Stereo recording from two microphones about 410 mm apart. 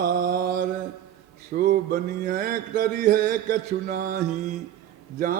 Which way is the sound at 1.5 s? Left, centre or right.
Centre.